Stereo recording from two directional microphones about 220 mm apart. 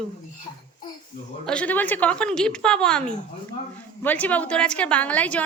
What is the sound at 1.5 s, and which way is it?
A woman's voice, 5° left (ahead or behind).